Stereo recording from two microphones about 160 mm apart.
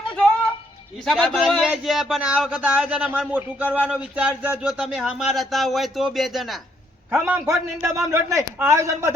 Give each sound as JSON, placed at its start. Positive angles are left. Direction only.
{"t": 1.0, "sound": "speech", "side_deg": 0}
{"t": 7.1, "sound": "speech", "side_deg": -10}